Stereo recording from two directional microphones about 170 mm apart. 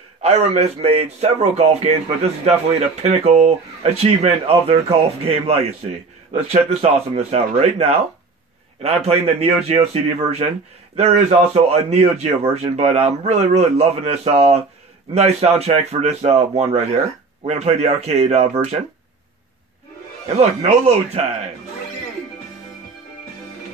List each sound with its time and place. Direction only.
0.2 s a man's voice: 40° right (ahead or behind)
20.3 s a man's voice: 40° right (ahead or behind)